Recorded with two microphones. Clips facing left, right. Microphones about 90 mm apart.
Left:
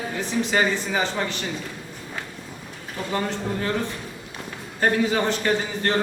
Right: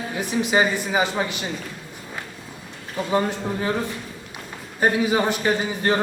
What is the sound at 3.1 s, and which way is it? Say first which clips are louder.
Speech: right 3 dB; 15° right (ahead or behind).